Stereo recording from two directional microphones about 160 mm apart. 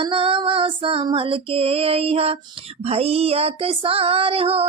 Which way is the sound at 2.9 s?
40° right (ahead or behind).